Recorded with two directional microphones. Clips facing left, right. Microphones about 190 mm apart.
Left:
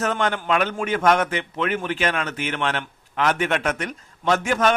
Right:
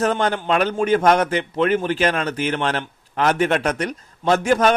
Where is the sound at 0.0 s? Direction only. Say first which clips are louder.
Right 3 dB; 35° right (ahead or behind).